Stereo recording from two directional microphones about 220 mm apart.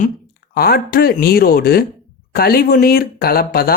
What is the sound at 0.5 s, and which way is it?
Speech, 45° left (ahead or behind).